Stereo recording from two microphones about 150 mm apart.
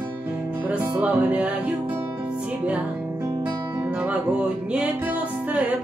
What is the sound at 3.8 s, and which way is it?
Music, 10° right (ahead or behind).